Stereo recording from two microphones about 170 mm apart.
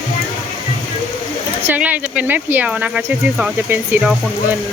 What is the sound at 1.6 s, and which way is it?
Speech, 10° right (ahead or behind).